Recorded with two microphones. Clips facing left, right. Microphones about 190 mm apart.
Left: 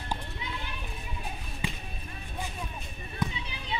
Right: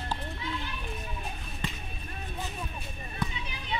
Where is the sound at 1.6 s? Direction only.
10° left (ahead or behind).